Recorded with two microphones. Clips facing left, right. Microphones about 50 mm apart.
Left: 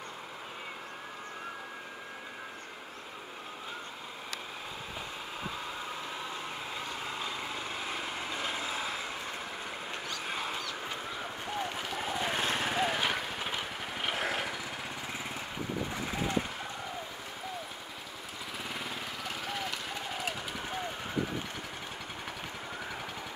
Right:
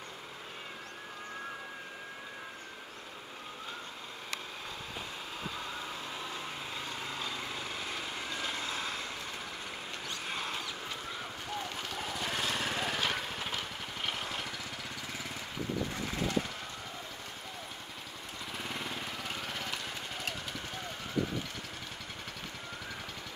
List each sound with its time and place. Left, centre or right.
7.0 s vehicle: centre
10.2 s a sound: centre
11.5 s lawn mower: centre
18.6 s jackhammer: centre